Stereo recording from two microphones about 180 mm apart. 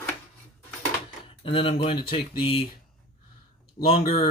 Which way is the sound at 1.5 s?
30° left (ahead or behind).